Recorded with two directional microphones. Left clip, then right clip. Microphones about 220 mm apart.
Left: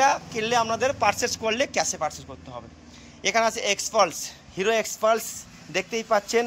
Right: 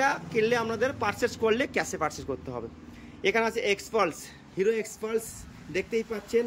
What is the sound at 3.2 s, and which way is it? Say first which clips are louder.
A man's voice: left 3 dB; 10° right (ahead or behind).